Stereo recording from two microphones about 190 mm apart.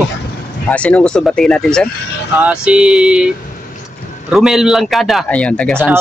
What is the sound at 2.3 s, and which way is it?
Speech, 5° right (ahead or behind).